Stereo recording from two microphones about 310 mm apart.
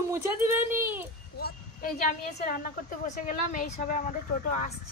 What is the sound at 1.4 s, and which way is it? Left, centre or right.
Speech, left.